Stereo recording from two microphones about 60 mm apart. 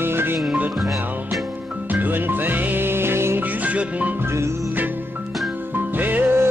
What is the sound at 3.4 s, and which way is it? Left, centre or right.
Music, right.